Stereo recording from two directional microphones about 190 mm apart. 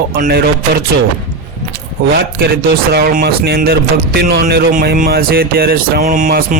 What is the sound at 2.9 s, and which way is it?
Speech, 55° right (ahead or behind).